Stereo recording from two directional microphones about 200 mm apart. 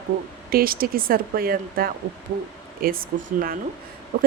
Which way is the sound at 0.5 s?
45° right (ahead or behind).